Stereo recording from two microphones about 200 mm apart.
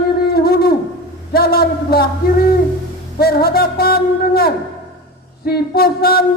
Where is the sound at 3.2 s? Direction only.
50° left (ahead or behind).